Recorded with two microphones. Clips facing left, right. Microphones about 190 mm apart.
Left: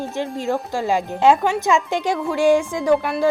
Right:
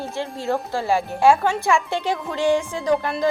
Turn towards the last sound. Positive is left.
turn(degrees=10)  # may be behind; listen again after turning